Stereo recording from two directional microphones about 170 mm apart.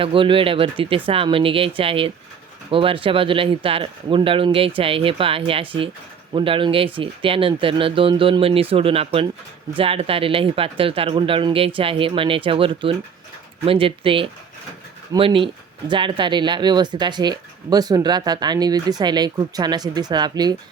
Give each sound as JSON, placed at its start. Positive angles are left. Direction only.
{"t": 0.0, "sound": "speech", "side_deg": -30}